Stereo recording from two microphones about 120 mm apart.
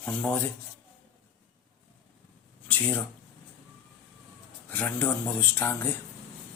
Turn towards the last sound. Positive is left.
turn(degrees=20)  # may be behind; listen again after turning